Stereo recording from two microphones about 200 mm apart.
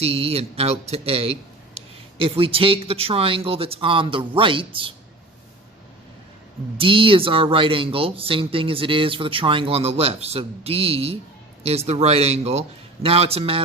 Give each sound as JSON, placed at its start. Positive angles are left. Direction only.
{"t": 0.0, "sound": "speech", "side_deg": -30}
{"t": 6.7, "sound": "a man's voice", "side_deg": -25}